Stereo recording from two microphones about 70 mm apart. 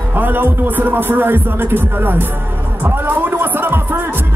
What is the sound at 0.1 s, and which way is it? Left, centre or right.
Speech, right.